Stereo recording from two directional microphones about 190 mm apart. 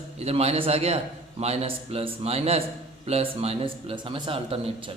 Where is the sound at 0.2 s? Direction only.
35° right (ahead or behind).